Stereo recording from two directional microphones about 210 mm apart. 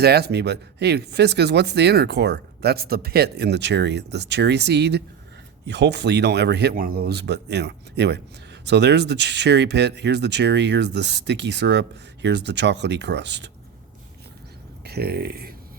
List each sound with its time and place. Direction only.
0.0 s speech: 50° right (ahead or behind)
14.8 s speech: 50° right (ahead or behind)